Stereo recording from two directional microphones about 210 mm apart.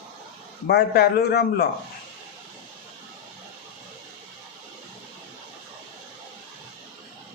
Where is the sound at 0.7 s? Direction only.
50° left (ahead or behind).